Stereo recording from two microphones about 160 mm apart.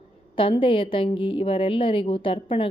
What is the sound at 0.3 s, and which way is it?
Speech, 35° left (ahead or behind).